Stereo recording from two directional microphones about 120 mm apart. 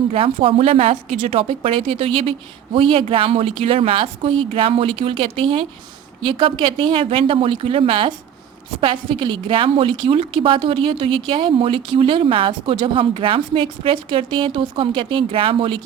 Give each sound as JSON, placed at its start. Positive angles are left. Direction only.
{"t": 0.1, "sound": "a woman's voice", "side_deg": -50}